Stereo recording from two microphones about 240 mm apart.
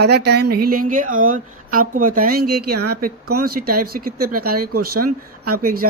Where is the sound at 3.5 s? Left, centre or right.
Right.